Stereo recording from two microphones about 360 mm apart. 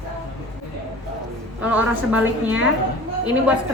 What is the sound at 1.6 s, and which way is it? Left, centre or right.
A woman's voice, centre.